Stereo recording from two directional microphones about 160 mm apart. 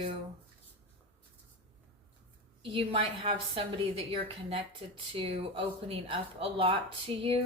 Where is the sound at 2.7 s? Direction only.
35° right (ahead or behind).